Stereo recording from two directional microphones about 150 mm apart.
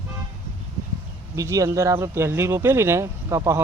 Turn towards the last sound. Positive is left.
turn(degrees=-20)  # may be behind; listen again after turning